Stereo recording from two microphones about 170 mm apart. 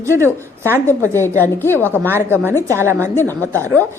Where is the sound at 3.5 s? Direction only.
15° right (ahead or behind).